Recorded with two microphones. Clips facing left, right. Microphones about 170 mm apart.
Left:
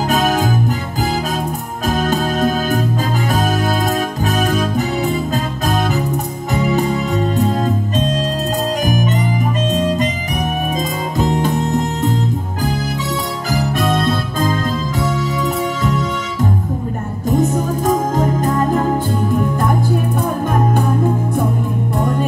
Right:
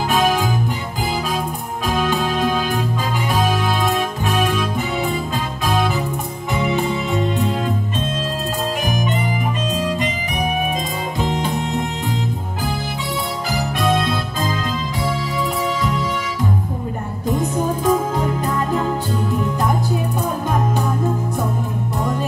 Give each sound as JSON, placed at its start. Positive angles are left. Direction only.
{"t": 0.1, "sound": "music", "side_deg": 40}
{"t": 1.9, "sound": "music", "side_deg": 40}
{"t": 9.7, "sound": "music", "side_deg": 40}
{"t": 11.1, "sound": "music", "side_deg": 45}
{"t": 13.5, "sound": "music", "side_deg": 45}
{"t": 17.3, "sound": "music", "side_deg": 45}